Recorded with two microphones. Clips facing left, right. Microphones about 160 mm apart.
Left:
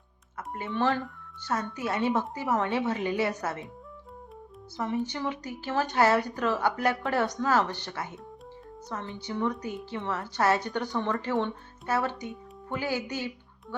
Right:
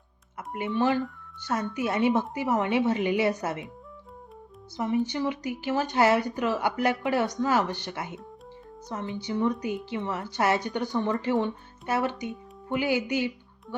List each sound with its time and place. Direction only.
0.3 s speech: 15° right (ahead or behind)
5.0 s speech: 15° right (ahead or behind)